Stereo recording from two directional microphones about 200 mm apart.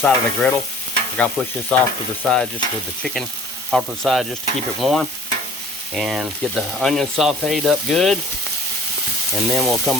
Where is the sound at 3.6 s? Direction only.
Centre (ahead or behind).